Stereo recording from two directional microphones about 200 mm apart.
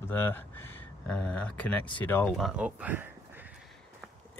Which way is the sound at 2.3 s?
5° right (ahead or behind).